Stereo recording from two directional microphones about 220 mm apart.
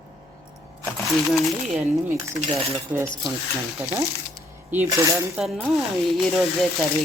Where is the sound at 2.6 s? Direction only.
25° right (ahead or behind).